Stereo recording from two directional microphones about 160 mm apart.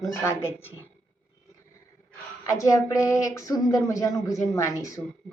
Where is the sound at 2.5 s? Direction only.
20° left (ahead or behind).